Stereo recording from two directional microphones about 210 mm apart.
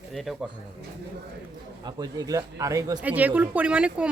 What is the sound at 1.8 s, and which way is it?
Speech, 20° right (ahead or behind).